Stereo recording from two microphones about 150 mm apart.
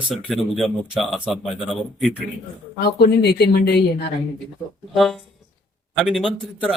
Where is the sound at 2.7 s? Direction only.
90° left.